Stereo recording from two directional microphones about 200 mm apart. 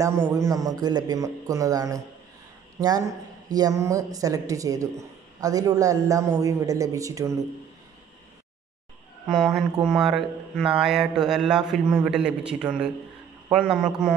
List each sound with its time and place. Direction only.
0.0 s a woman's voice: 15° right (ahead or behind)
9.3 s speech: centre (ahead or behind)